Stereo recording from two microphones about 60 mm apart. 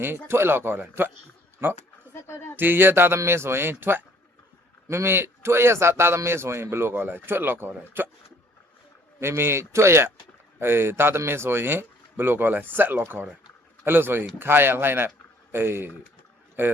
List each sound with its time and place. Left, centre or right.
0.3 s speech: right
2.1 s a sound: left
2.6 s speech: right
9.2 s speech: right